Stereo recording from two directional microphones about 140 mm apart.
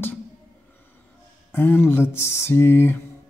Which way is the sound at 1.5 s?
15° left (ahead or behind).